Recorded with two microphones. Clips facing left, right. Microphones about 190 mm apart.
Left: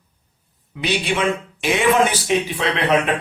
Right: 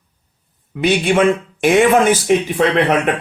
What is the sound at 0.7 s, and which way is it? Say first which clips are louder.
Speech: right 7 dB; 50° right (ahead or behind).